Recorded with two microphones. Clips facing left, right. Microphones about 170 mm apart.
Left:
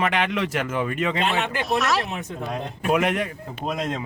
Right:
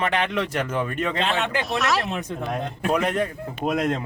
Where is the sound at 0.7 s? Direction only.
Centre (ahead or behind).